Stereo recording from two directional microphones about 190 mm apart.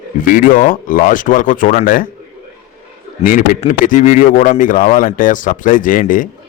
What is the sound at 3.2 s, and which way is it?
Speech, 45° left (ahead or behind).